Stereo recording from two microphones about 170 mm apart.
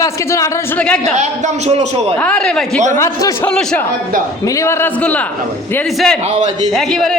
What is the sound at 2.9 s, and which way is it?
Speech, 20° left (ahead or behind).